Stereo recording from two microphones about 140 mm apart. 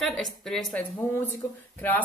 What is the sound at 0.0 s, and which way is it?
Speech, centre (ahead or behind).